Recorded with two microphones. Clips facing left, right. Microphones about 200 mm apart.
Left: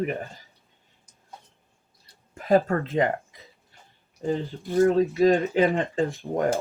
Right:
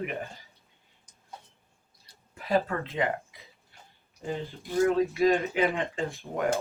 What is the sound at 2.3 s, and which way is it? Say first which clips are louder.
Speech: left 6 dB; 45° left (ahead or behind).